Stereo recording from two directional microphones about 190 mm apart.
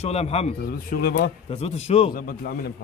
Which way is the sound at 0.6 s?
50° left (ahead or behind).